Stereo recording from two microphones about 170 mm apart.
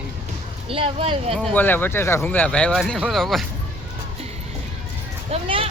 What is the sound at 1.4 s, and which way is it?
Speech, 10° left (ahead or behind).